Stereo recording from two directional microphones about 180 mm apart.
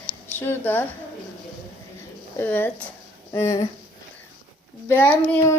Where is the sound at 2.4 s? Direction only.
10° left (ahead or behind).